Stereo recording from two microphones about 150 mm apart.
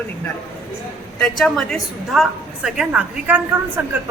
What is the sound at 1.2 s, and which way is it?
A woman's voice, 5° left (ahead or behind).